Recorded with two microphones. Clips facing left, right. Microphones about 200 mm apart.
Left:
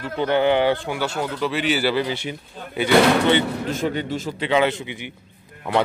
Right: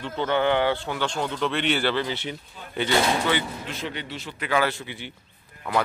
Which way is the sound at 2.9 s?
65° left (ahead or behind).